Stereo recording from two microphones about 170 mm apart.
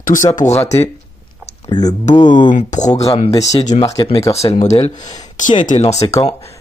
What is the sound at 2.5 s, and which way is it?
Speech, 45° left (ahead or behind).